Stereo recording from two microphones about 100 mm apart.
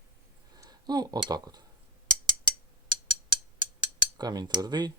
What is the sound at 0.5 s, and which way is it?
Speech, 40° right (ahead or behind).